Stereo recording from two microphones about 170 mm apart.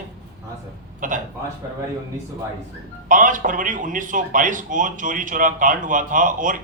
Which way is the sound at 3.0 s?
50° right (ahead or behind).